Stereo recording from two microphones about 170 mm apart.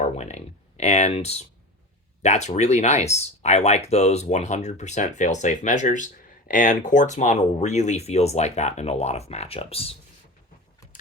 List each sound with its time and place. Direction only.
0.0 s speech: 40° left (ahead or behind)